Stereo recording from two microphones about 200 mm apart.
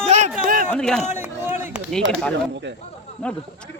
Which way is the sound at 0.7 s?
5° left (ahead or behind).